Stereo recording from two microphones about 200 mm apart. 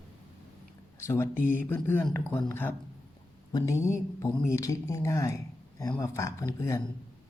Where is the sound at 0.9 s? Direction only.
15° left (ahead or behind).